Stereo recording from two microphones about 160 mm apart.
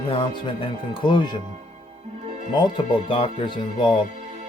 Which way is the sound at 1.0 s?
30° left (ahead or behind).